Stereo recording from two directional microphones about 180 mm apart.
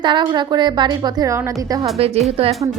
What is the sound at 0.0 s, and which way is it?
A woman's voice, 25° right (ahead or behind).